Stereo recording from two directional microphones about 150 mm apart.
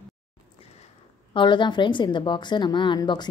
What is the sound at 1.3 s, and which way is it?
A woman's voice, 30° left (ahead or behind).